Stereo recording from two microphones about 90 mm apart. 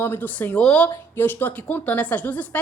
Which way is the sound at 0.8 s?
20° left (ahead or behind).